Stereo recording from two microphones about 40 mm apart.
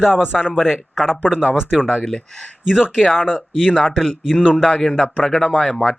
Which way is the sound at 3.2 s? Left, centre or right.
Centre.